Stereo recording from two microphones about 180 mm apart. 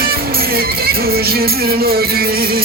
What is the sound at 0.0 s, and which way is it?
Music, 55° right (ahead or behind).